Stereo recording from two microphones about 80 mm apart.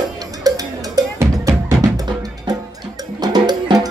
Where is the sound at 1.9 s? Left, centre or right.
Right.